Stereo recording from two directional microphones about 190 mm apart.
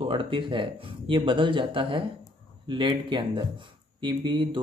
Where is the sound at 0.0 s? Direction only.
25° right (ahead or behind).